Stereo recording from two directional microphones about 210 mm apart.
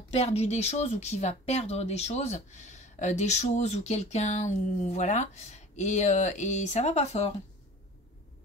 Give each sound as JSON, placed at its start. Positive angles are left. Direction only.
{"t": 0.1, "sound": "speech", "side_deg": 30}